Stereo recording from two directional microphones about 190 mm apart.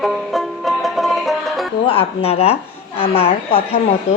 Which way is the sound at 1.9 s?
30° left (ahead or behind).